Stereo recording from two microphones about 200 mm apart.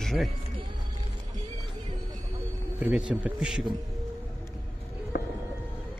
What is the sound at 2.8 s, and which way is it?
Speech, 5° right (ahead or behind).